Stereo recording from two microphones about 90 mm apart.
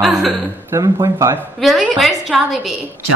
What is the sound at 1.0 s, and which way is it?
Speech, 35° right (ahead or behind).